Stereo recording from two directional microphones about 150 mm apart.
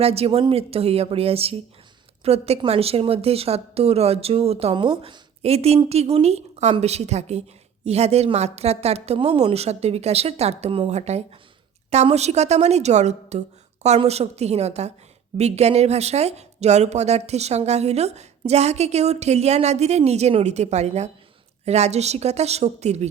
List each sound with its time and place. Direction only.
0.0 s a woman's voice: 40° right (ahead or behind)